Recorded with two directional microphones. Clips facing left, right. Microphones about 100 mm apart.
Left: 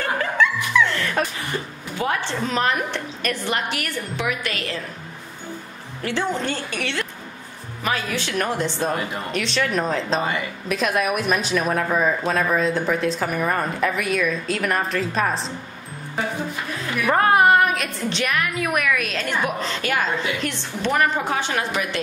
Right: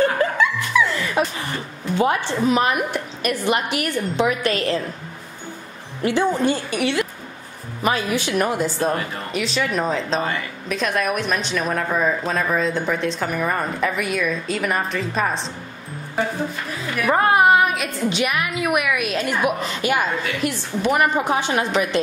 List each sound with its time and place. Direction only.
0.0 s music: 20° right (ahead or behind)
0.7 s music: 5° right (ahead or behind)
2.0 s a woman's voice: 20° right (ahead or behind)
6.0 s a woman's voice: 15° right (ahead or behind)
16.8 s a woman's voice: 5° right (ahead or behind); by 22.0 s 20° right (ahead or behind)